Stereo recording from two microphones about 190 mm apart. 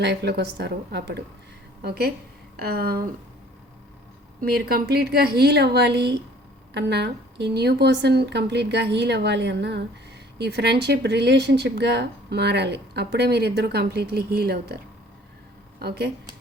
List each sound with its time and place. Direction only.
0.0 s speech: 60° right (ahead or behind)
2.6 s a sound: 55° right (ahead or behind)
4.4 s speech: 50° right (ahead or behind)
15.8 s speech: 55° right (ahead or behind)